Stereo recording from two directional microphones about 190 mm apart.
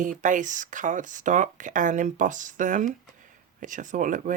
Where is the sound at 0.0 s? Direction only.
40° right (ahead or behind).